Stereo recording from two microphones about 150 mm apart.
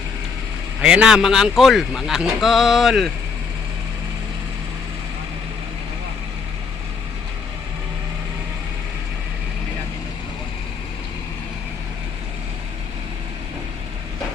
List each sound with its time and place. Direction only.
0.8 s speech: 5° right (ahead or behind)